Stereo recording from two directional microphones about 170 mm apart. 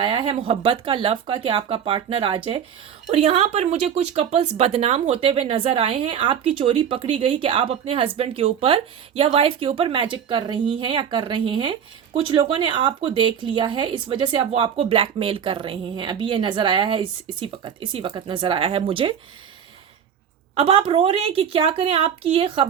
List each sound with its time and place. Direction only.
0.0 s speech: 30° right (ahead or behind)
20.6 s speech: 35° right (ahead or behind)